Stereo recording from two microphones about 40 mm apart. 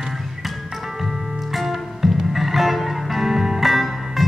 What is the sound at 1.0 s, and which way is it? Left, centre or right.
Music, centre.